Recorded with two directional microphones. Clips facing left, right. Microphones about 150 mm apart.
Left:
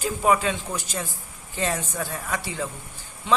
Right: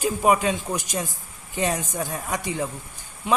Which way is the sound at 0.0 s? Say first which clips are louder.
Right 2 dB; 15° right (ahead or behind).